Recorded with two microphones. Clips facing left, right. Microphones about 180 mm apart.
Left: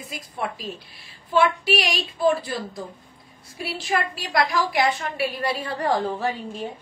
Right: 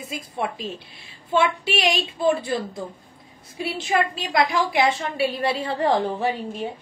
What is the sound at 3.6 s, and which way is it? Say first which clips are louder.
A woman's voice: right 3 dB; 20° right (ahead or behind).